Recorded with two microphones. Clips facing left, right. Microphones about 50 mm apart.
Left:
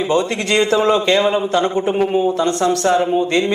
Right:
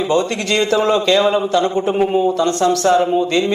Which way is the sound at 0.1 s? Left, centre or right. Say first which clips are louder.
Left 1 dB; left.